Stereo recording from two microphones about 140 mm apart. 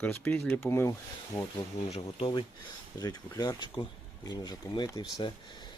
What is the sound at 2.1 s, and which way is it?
Speech, 35° left (ahead or behind).